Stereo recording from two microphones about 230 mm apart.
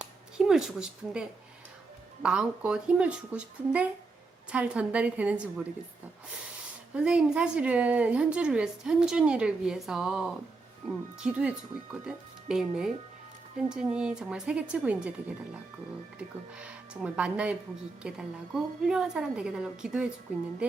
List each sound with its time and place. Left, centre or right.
0.0 s a sound: centre
2.2 s a woman's voice: centre
6.9 s a woman's voice: centre
16.1 s a woman's voice: centre